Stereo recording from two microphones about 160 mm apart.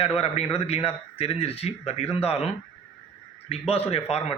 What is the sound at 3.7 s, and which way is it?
Speech, 40° left (ahead or behind).